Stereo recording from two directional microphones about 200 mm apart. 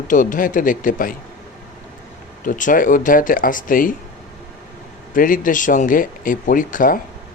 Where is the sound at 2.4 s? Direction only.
40° left (ahead or behind).